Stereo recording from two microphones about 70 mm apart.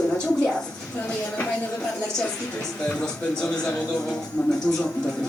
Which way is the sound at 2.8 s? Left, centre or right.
Centre.